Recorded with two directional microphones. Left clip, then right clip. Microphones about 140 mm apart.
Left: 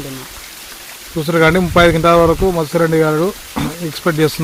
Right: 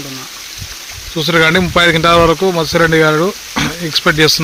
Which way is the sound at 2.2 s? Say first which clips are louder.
Right 2 dB; 10° right (ahead or behind).